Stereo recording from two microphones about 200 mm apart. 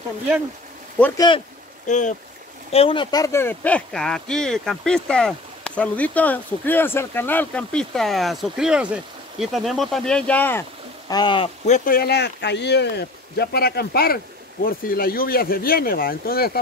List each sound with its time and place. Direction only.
0.9 s speech: 10° left (ahead or behind)
1.9 s speech: 40° left (ahead or behind); by 10.6 s 10° left (ahead or behind)
11.1 s speech: 20° left (ahead or behind); by 16.5 s 50° left (ahead or behind)